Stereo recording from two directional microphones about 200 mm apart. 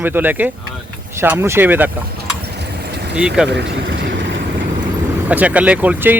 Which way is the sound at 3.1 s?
5° right (ahead or behind).